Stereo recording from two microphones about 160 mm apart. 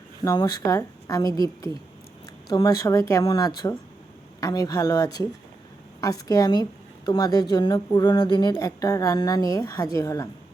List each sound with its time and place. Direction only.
0.2 s a woman's voice: 30° left (ahead or behind)
2.5 s a woman's voice: 25° left (ahead or behind)